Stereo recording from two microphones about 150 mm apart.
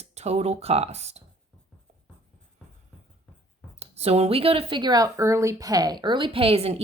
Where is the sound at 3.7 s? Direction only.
45° right (ahead or behind).